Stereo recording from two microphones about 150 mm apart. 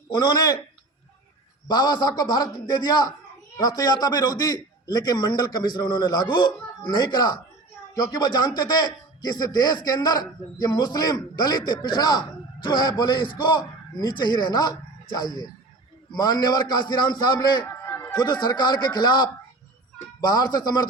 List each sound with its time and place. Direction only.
0.1 s a man's voice: 30° left (ahead or behind)
1.6 s a man's voice: 30° left (ahead or behind)
17.7 s a sound: 15° left (ahead or behind)
18.2 s a man's voice: 30° left (ahead or behind)